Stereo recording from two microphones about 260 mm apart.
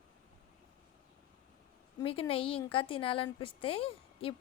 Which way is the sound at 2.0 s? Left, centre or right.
Left.